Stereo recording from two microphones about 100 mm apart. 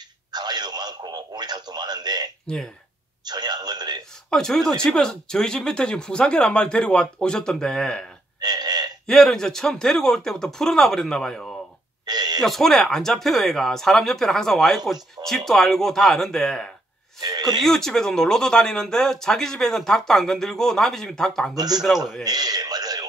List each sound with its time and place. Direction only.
0.3 s speech: 45° right (ahead or behind)
2.4 s speech: 5° left (ahead or behind)
3.3 s a sound: 45° right (ahead or behind)
4.3 s speech: 5° left (ahead or behind)
8.4 s burping: 45° right (ahead or behind)
9.0 s speech: 5° left (ahead or behind)
12.1 s a sound: 45° right (ahead or behind)
12.4 s speech: centre (ahead or behind)
17.2 s speech: 40° right (ahead or behind)
17.6 s speech: 5° left (ahead or behind)
21.5 s a man's voice: 40° right (ahead or behind)
22.2 s a sound: 40° right (ahead or behind)